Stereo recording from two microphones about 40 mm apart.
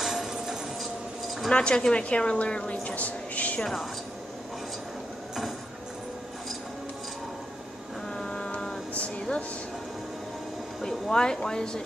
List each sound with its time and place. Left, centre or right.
0.0 s music: centre
1.5 s a woman's voice: left
8.2 s a sound: left
10.8 s speech: centre